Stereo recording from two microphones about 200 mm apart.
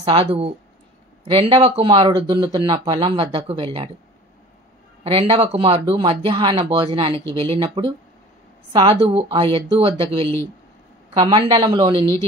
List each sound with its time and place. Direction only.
0.0 s speech: 25° right (ahead or behind)
5.0 s speech: 30° right (ahead or behind)
11.1 s speech: 25° right (ahead or behind)